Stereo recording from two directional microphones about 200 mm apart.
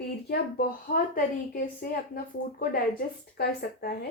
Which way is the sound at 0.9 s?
45° left (ahead or behind).